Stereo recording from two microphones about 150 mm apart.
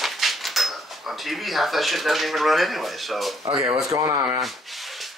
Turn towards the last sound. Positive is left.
turn(degrees=0)  # may be behind; listen again after turning